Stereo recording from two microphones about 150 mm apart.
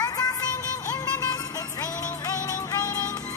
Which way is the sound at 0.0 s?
25° left (ahead or behind).